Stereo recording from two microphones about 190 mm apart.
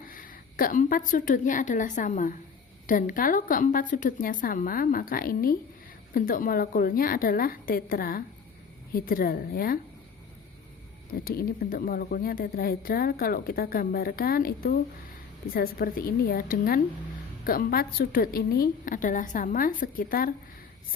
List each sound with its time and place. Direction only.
0.1 s a woman's voice: 50° left (ahead or behind)
11.1 s a woman's voice: 50° left (ahead or behind)